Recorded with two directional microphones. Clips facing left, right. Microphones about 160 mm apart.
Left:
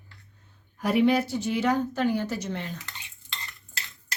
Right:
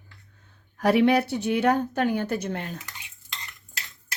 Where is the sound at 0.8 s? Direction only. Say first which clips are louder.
Right 2 dB; 70° right (ahead or behind); by 2.7 s 50° right (ahead or behind).